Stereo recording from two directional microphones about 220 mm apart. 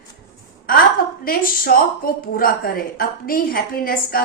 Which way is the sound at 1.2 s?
40° left (ahead or behind).